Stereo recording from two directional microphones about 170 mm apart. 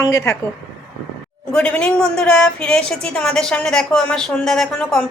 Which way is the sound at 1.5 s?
5° left (ahead or behind).